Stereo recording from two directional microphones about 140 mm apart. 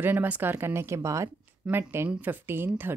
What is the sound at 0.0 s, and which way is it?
Speech, 15° right (ahead or behind).